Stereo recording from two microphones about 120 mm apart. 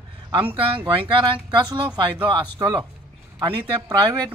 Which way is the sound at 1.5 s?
40° right (ahead or behind).